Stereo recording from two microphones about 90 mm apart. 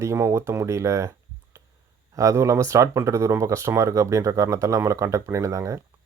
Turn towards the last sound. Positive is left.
turn(degrees=-35)  # may be behind; listen again after turning